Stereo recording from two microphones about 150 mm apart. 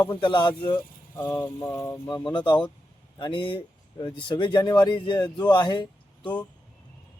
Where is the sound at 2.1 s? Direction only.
30° left (ahead or behind).